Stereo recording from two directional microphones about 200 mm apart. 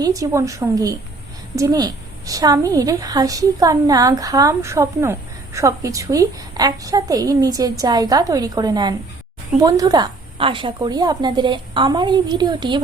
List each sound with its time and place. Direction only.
0.0 s a woman's voice: 15° right (ahead or behind)